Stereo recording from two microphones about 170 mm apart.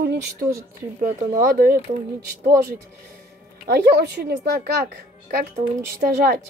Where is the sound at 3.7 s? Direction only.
75° right (ahead or behind).